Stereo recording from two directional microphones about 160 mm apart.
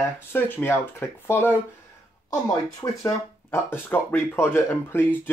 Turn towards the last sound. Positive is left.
turn(degrees=15)  # may be behind; listen again after turning